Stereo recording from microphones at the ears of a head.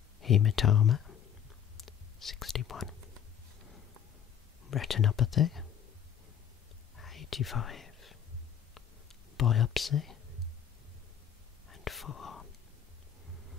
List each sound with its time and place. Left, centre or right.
0.2 s speech: left
2.5 s speech: left
4.6 s speech: left
7.0 s whispering: left
9.4 s speech: left
11.7 s whispering: left